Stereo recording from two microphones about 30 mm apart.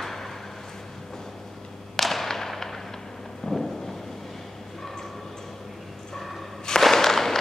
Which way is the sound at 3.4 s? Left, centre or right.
Centre.